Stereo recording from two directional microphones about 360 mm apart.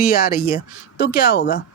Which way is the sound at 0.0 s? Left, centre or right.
Left.